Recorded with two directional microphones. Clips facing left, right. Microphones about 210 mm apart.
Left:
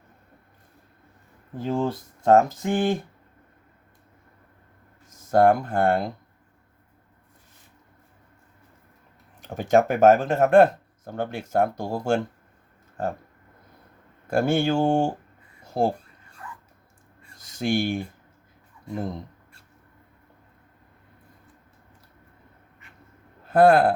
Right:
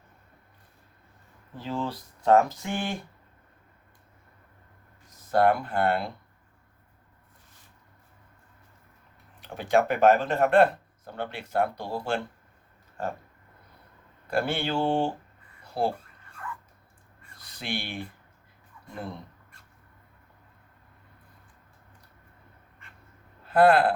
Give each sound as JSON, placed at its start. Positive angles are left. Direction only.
{"t": 1.5, "sound": "speech", "side_deg": 50}
{"t": 5.1, "sound": "speech", "side_deg": 45}
{"t": 9.4, "sound": "speech", "side_deg": 45}
{"t": 14.3, "sound": "speech", "side_deg": 45}
{"t": 15.6, "sound": "a sound", "side_deg": 45}
{"t": 17.3, "sound": "a sound", "side_deg": 45}
{"t": 23.5, "sound": "speech", "side_deg": 45}